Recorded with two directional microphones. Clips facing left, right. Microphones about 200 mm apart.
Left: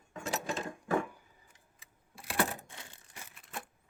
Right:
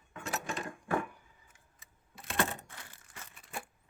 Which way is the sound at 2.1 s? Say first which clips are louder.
Left 1 dB; 5° left (ahead or behind).